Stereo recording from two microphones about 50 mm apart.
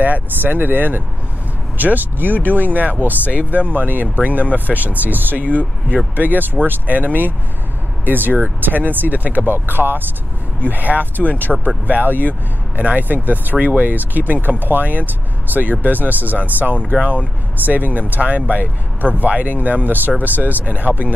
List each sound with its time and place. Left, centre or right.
0.0 s speech: right
11.2 s speech: left
11.9 s speech: right